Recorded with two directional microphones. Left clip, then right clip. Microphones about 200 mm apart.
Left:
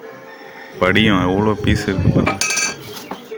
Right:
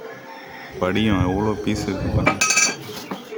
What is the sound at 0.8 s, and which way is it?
Speech, 10° left (ahead or behind).